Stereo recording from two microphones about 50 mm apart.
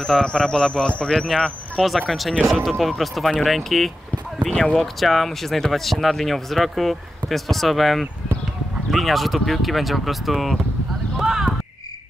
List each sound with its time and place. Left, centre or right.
0.0 s speech: centre
1.8 s speech: centre
11.1 s a sound: centre